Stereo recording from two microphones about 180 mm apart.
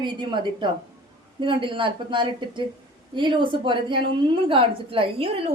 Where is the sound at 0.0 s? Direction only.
25° right (ahead or behind).